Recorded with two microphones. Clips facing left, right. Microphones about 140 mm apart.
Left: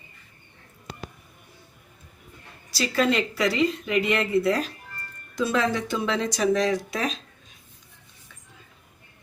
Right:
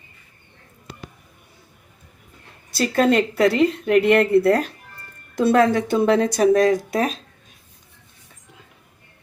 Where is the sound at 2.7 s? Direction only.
50° right (ahead or behind).